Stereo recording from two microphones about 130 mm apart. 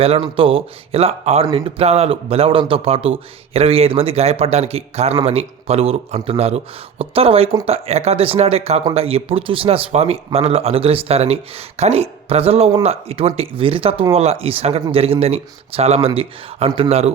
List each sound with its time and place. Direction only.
0.0 s a man's voice: 45° right (ahead or behind)